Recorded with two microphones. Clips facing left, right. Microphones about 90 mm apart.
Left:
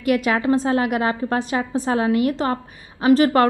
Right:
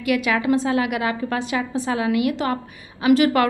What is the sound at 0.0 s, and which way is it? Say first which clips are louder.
A woman's voice: left 2 dB; 40° left (ahead or behind).